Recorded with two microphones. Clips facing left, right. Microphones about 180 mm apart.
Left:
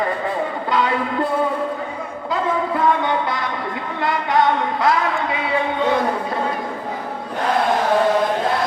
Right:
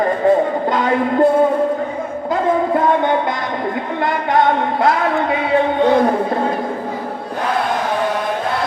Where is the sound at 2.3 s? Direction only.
45° right (ahead or behind).